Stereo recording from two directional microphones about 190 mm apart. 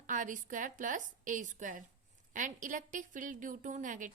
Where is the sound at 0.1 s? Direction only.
45° right (ahead or behind).